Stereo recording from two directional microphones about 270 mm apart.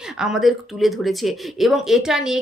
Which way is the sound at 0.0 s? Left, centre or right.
Centre.